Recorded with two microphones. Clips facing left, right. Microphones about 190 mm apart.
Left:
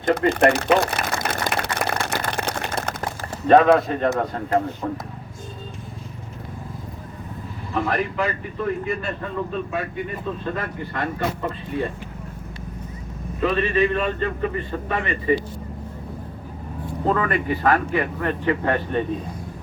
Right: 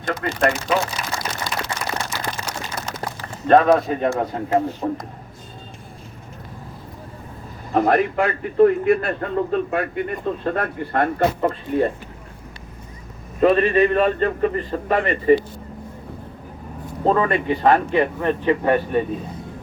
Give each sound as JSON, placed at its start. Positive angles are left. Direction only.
{"t": 0.3, "sound": "a sound", "side_deg": 60}
{"t": 3.5, "sound": "a man's voice", "side_deg": -5}
{"t": 4.8, "sound": "speech", "side_deg": -25}
{"t": 7.7, "sound": "speech", "side_deg": -50}
{"t": 13.4, "sound": "a man's voice", "side_deg": -45}
{"t": 17.1, "sound": "speech", "side_deg": -30}
{"t": 18.6, "sound": "a man's voice", "side_deg": -10}